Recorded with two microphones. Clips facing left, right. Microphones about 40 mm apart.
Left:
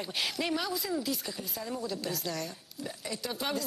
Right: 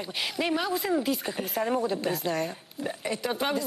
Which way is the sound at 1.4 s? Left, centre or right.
Right.